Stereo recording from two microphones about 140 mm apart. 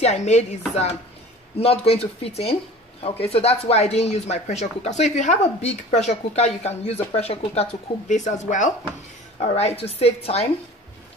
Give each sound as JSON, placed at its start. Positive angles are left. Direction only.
{"t": 0.0, "sound": "speech", "side_deg": 55}
{"t": 8.1, "sound": "speech", "side_deg": 60}
{"t": 9.4, "sound": "speech", "side_deg": 50}